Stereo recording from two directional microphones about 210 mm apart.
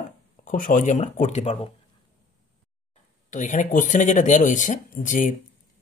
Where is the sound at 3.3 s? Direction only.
35° left (ahead or behind).